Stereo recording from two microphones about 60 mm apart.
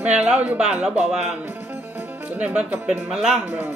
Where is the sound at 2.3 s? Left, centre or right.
Right.